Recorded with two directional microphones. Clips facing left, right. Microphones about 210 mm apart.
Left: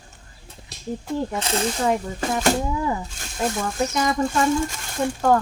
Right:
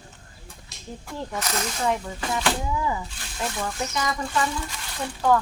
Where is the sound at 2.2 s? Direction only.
45° left (ahead or behind).